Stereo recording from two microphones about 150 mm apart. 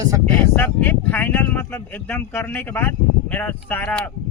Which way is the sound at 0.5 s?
10° left (ahead or behind).